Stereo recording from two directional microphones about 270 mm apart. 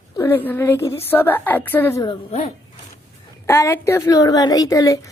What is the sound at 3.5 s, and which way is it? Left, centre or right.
A woman's voice, centre.